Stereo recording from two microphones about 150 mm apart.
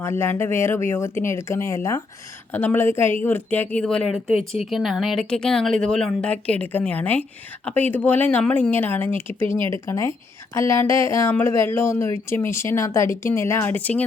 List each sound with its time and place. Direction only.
0.0 s speech: 15° left (ahead or behind)